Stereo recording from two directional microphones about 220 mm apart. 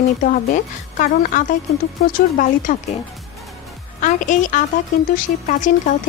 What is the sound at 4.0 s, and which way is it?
Speech, 35° left (ahead or behind).